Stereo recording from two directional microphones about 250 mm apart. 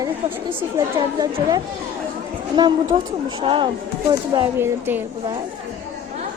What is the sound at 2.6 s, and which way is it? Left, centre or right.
Speech, centre.